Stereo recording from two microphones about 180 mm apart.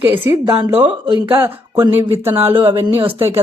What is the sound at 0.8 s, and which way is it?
Speech, 25° right (ahead or behind).